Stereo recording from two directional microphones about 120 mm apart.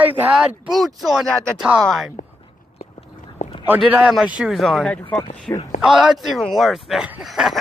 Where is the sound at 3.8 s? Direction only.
10° right (ahead or behind); by 5.5 s 5° left (ahead or behind).